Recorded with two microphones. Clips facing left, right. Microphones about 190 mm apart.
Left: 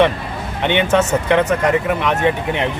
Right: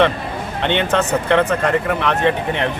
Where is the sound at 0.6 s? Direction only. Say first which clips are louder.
Left 3 dB; 10° left (ahead or behind).